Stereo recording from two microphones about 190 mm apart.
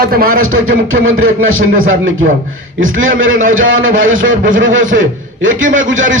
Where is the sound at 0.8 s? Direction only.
90° right.